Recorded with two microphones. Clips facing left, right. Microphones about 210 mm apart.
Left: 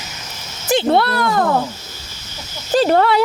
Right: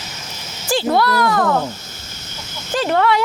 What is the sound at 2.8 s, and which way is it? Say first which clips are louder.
Speech: left 3 dB; 35° left (ahead or behind).